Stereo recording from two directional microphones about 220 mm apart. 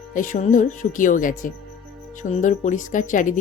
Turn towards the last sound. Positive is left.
turn(degrees=35)  # may be behind; listen again after turning